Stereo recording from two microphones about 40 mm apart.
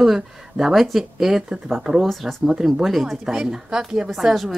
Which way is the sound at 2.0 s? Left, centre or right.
Centre.